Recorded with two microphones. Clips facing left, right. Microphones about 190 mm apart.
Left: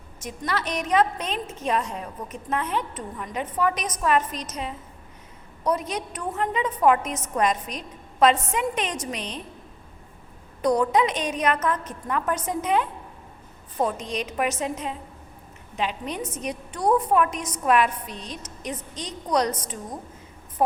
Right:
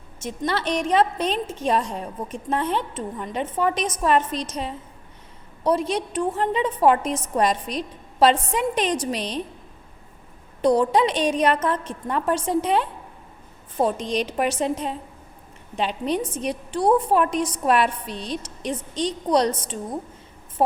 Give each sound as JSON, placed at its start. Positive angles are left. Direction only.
{"t": 0.2, "sound": "a woman's voice", "side_deg": -30}
{"t": 10.6, "sound": "a woman's voice", "side_deg": -30}